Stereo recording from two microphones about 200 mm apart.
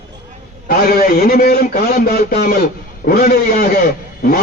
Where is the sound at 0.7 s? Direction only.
45° left (ahead or behind).